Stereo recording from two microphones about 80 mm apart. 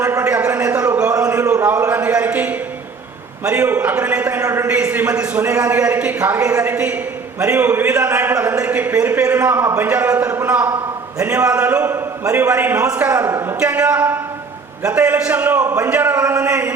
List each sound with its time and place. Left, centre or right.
0.3 s a sound: centre
1.9 s a man's voice: centre
4.4 s a woman's voice: right
4.7 s a man's voice: centre
13.2 s a woman's voice: right
13.6 s a man's voice: centre